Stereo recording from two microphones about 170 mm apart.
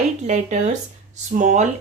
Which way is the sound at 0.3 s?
45° right (ahead or behind).